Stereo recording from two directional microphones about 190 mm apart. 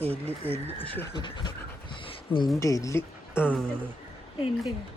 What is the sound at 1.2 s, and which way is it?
Speech, 25° left (ahead or behind).